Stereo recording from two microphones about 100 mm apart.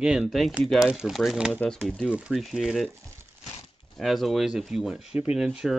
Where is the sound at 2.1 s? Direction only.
5° right (ahead or behind).